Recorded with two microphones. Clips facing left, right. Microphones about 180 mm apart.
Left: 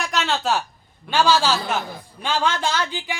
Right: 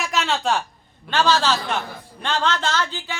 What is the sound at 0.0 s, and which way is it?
Speech, centre (ahead or behind).